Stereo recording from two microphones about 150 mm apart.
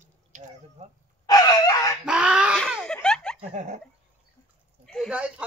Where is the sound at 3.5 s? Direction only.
55° right (ahead or behind).